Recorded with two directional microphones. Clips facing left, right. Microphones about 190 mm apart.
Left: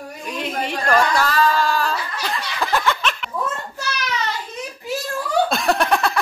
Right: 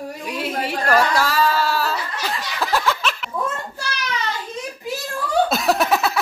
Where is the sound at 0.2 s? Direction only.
5° right (ahead or behind).